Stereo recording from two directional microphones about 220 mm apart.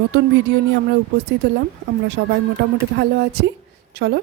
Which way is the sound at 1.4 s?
50° right (ahead or behind).